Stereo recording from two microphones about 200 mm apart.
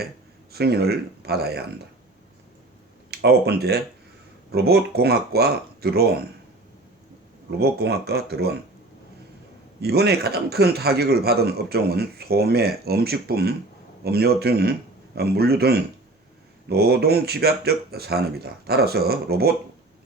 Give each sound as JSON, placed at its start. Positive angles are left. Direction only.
{"t": 0.5, "sound": "speech", "side_deg": -50}
{"t": 3.1, "sound": "speech", "side_deg": -55}
{"t": 7.6, "sound": "speech", "side_deg": -55}
{"t": 9.8, "sound": "speech", "side_deg": -55}